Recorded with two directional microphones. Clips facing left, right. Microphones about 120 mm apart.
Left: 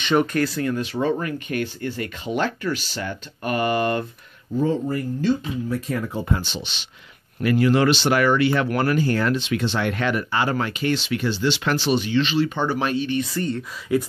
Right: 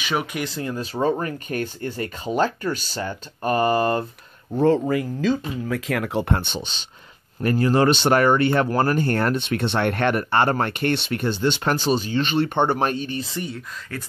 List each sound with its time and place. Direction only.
0.0 s speech: 5° right (ahead or behind)
0.4 s speech: 25° right (ahead or behind)
1.0 s speech: 35° right (ahead or behind)
4.5 s speech: 65° right (ahead or behind)
5.7 s speech: 90° right
7.4 s speech: 35° right (ahead or behind)
7.9 s speech: 45° right (ahead or behind)
8.6 s speech: 30° right (ahead or behind)
8.9 s speech: 50° right (ahead or behind)
13.4 s speech: 5° right (ahead or behind)
13.9 s speech: 15° left (ahead or behind)